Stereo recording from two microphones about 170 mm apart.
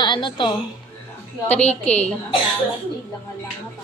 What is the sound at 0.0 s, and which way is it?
Speech, 25° left (ahead or behind).